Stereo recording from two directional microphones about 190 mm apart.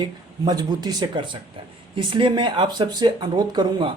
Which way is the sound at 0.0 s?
20° right (ahead or behind).